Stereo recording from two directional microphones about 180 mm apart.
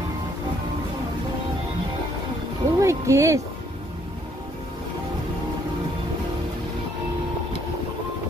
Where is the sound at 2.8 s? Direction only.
15° right (ahead or behind).